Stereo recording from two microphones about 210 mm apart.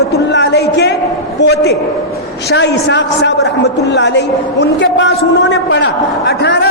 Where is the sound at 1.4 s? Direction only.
55° left (ahead or behind).